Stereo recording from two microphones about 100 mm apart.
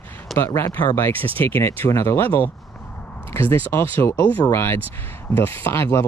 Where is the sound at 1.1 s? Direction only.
65° right (ahead or behind).